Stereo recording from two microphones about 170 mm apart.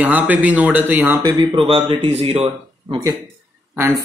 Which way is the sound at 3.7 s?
15° right (ahead or behind).